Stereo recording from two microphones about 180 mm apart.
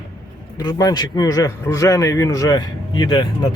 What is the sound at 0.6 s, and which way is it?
A man's voice, 20° left (ahead or behind).